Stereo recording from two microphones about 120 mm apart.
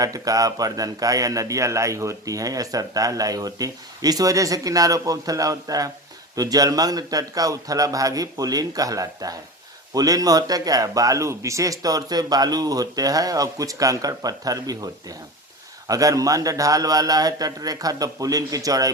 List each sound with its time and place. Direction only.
0.0 s a man's voice: 30° right (ahead or behind)
15.9 s speech: 30° right (ahead or behind)